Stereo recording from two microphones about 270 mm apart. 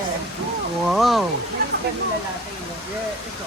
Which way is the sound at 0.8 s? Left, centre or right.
Centre.